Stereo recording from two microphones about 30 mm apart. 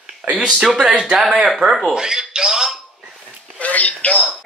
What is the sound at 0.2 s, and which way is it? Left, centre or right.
Speech, right.